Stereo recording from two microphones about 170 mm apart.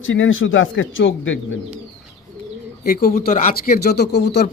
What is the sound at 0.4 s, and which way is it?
Speech, 90° left.